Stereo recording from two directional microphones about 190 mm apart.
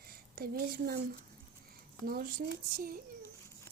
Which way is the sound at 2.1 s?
50° right (ahead or behind).